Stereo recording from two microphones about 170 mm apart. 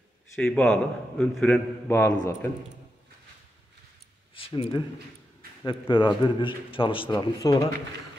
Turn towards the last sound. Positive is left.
turn(degrees=20)  # may be behind; listen again after turning